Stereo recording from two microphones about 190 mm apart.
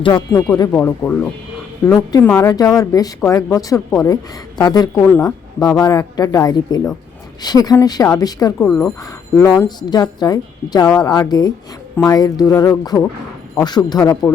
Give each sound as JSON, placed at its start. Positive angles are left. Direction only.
{"t": 0.0, "sound": "speech", "side_deg": 25}
{"t": 8.5, "sound": "speech", "side_deg": 5}